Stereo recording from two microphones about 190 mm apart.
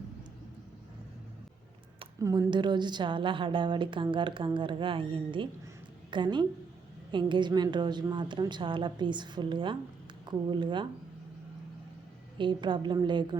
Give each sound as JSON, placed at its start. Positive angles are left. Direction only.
{"t": 2.2, "sound": "a woman's voice", "side_deg": -20}
{"t": 12.4, "sound": "a woman's voice", "side_deg": -25}